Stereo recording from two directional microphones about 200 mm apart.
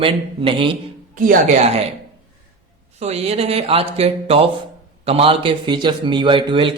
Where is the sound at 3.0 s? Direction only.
30° right (ahead or behind).